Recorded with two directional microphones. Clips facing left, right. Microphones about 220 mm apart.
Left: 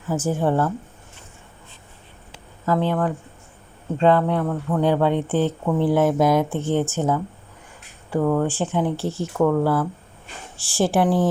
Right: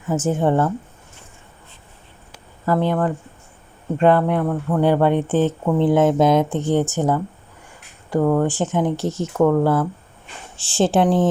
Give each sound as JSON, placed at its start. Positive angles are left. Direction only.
{"t": 0.1, "sound": "speech", "side_deg": -20}
{"t": 2.6, "sound": "speech", "side_deg": -10}